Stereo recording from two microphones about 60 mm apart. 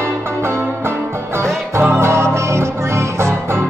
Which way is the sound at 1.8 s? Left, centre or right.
Right.